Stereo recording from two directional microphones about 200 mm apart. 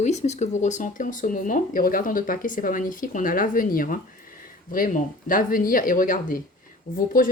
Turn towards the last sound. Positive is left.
turn(degrees=40)  # may be behind; listen again after turning